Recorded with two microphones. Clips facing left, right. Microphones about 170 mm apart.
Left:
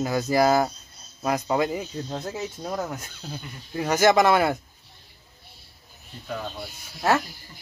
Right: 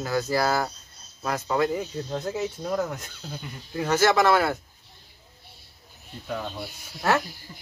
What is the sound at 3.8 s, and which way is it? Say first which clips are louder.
Speech: left 2 dB; 15° left (ahead or behind).